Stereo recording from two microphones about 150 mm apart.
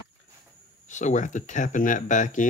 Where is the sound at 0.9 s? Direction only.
55° left (ahead or behind).